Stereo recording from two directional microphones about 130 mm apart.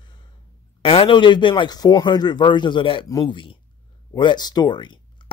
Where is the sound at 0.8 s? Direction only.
40° left (ahead or behind).